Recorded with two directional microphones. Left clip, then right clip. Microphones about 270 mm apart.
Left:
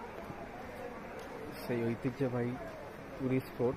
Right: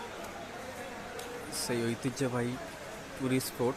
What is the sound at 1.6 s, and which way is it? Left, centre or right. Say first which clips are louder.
Speech: right 2 dB; centre.